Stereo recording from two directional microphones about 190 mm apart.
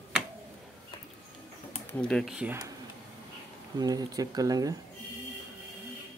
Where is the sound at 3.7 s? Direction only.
20° right (ahead or behind).